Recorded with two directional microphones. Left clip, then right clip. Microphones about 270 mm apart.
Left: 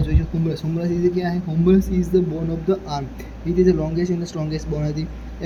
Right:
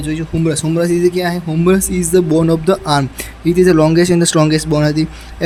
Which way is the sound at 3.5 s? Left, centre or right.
Right.